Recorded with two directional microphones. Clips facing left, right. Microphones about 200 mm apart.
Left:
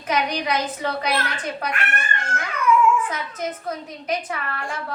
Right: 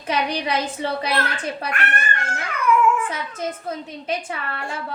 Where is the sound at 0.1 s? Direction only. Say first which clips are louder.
Even; 30° right (ahead or behind).